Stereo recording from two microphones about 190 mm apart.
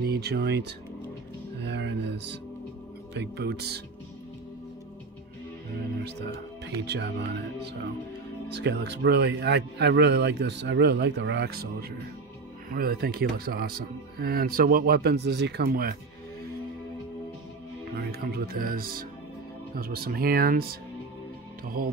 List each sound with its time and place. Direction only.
0.0 s a man's voice: 55° right (ahead or behind)
1.6 s a sound: 65° right (ahead or behind)
3.2 s a man's voice: 60° right (ahead or behind)
6.8 s a man's voice: 65° right (ahead or behind)
8.5 s a man's voice: 60° right (ahead or behind)
17.9 s speech: 55° right (ahead or behind)
21.8 s speech: 50° right (ahead or behind)